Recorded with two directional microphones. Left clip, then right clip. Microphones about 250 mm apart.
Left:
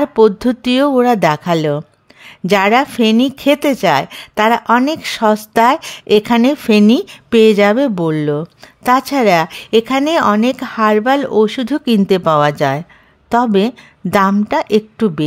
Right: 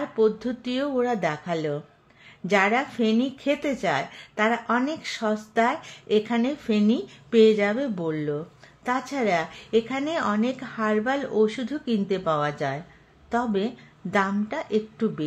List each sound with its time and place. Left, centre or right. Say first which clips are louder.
0.0 s a woman's voice: left 12 dB; left